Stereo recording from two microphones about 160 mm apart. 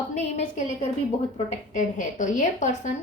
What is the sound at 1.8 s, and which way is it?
A woman's voice, 50° left (ahead or behind).